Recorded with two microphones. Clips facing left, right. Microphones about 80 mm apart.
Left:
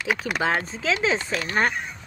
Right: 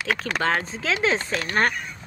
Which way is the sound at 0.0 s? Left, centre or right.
Centre.